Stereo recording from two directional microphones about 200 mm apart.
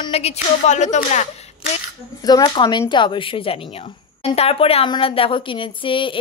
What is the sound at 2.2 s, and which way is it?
Speech, 20° left (ahead or behind).